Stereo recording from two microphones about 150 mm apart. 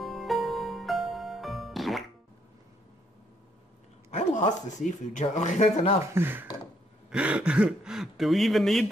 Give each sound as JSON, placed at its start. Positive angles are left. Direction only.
{"t": 0.0, "sound": "music", "side_deg": 0}
{"t": 4.1, "sound": "speech", "side_deg": 55}
{"t": 6.1, "sound": "speech", "side_deg": -15}